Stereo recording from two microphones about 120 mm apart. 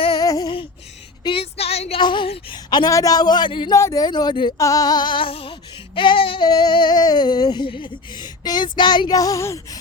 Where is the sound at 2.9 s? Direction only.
30° left (ahead or behind).